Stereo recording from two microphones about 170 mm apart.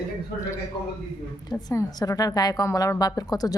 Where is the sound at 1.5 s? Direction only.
25° left (ahead or behind).